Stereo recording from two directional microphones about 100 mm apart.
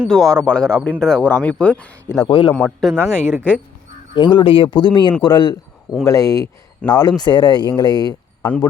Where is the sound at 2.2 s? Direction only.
50° left (ahead or behind).